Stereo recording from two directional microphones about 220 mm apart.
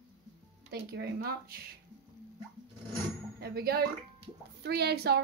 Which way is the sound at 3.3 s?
45° right (ahead or behind).